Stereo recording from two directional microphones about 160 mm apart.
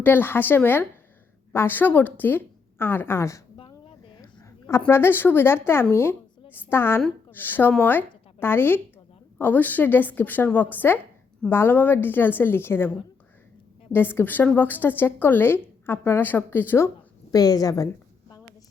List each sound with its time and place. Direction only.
0.0 s a woman's voice: 10° left (ahead or behind)
3.6 s a sound: 35° left (ahead or behind)
4.8 s a woman's voice: 15° left (ahead or behind)
13.9 s a woman's voice: 15° left (ahead or behind)